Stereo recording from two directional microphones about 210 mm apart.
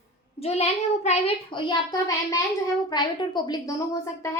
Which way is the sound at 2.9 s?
20° left (ahead or behind).